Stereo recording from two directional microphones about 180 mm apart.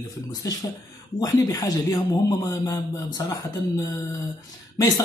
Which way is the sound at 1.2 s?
20° left (ahead or behind).